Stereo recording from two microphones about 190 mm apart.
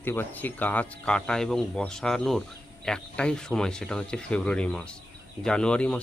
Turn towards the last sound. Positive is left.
turn(degrees=5)  # may be behind; listen again after turning